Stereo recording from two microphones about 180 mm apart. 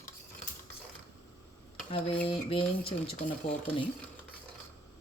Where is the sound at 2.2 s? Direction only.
30° left (ahead or behind).